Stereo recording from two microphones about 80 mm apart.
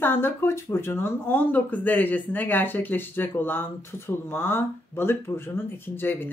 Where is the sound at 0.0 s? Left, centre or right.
Left.